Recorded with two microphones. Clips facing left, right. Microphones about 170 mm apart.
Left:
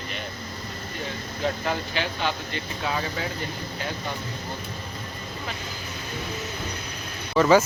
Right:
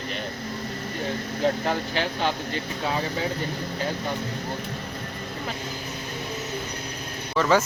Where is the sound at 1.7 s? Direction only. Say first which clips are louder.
Right 2 dB; 40° right (ahead or behind).